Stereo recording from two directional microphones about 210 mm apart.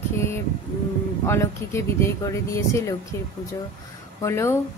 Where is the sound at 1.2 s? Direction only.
10° left (ahead or behind).